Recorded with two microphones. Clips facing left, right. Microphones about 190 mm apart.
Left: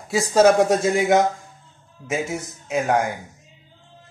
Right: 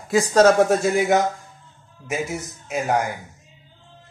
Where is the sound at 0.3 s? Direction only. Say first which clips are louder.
Left 1 dB; 10° left (ahead or behind).